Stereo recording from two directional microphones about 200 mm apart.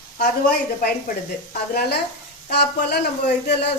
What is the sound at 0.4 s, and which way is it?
Speech, 45° left (ahead or behind).